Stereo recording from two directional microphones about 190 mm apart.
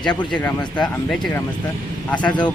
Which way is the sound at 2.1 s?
5° left (ahead or behind).